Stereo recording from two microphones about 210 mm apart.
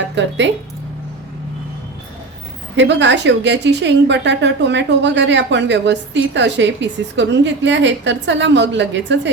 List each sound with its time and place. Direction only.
0.2 s a woman's voice: 60° right (ahead or behind)
2.7 s a woman's voice: 60° right (ahead or behind)